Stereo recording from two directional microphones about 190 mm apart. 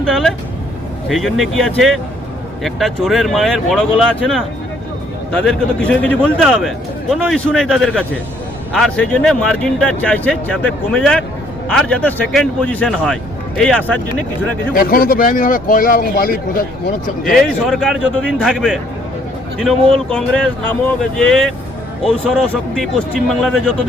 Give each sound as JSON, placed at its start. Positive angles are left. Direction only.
{"t": 0.0, "sound": "a man's voice", "side_deg": 0}
{"t": 14.7, "sound": "speech", "side_deg": 50}
{"t": 17.2, "sound": "a man's voice", "side_deg": 0}
{"t": 20.1, "sound": "a man's voice", "side_deg": 5}
{"t": 22.7, "sound": "a man's voice", "side_deg": 0}